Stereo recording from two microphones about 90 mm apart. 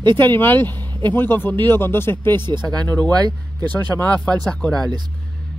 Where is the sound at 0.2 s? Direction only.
25° left (ahead or behind).